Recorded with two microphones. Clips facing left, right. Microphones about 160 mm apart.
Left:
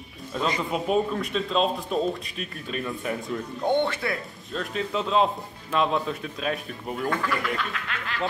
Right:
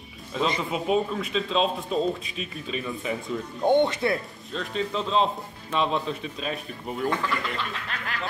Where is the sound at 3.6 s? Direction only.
15° right (ahead or behind).